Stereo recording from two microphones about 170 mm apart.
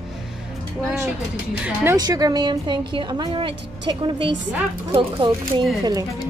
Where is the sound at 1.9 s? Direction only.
20° right (ahead or behind).